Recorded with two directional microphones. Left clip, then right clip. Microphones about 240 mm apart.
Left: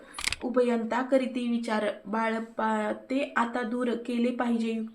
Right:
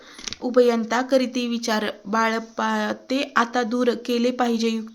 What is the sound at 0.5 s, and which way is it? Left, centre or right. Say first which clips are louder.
Speech: right 9 dB; right.